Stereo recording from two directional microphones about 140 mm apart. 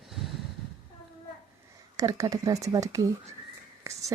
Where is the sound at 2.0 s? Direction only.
25° right (ahead or behind).